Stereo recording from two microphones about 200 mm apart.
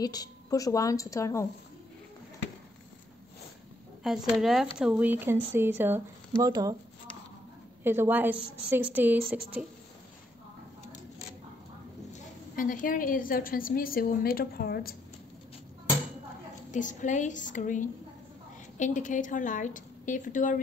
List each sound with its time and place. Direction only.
0.0 s a woman's voice: 20° left (ahead or behind)
4.3 s speech: centre (ahead or behind); by 6.8 s 20° right (ahead or behind)
7.8 s speech: 10° right (ahead or behind)
12.1 s a woman's voice: 40° left (ahead or behind)
16.7 s a woman's voice: 40° left (ahead or behind)